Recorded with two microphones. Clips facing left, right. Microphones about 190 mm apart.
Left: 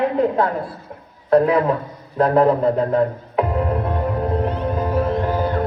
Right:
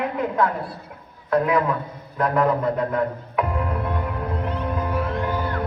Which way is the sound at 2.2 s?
30° left (ahead or behind).